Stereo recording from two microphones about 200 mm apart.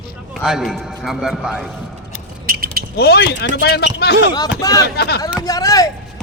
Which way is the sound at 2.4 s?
45° right (ahead or behind).